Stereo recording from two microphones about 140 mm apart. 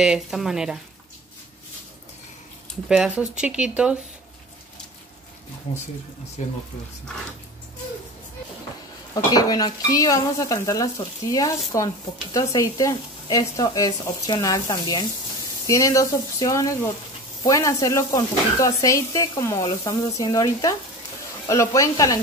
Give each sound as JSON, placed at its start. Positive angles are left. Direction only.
{"t": 0.0, "sound": "speech", "side_deg": -5}
{"t": 2.9, "sound": "speech", "side_deg": -5}
{"t": 9.1, "sound": "speech", "side_deg": 25}